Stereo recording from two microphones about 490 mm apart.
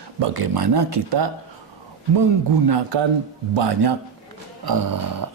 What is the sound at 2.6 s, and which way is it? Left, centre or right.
Speech, right.